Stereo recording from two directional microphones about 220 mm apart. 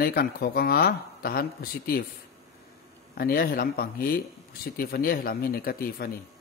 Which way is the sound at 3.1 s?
45° left (ahead or behind).